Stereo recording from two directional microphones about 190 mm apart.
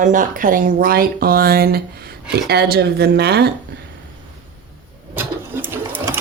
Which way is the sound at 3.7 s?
55° right (ahead or behind).